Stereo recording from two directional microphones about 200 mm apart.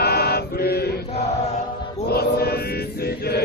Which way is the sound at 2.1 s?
50° left (ahead or behind).